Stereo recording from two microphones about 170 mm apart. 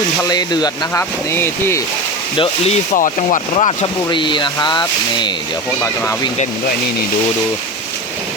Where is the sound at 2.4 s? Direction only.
40° left (ahead or behind); by 6.3 s 15° left (ahead or behind).